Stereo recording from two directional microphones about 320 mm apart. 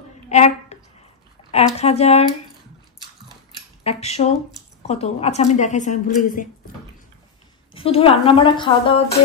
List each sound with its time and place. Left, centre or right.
0.3 s a sound: left
1.5 s a woman's voice: centre
3.8 s speech: centre
7.7 s a woman's voice: centre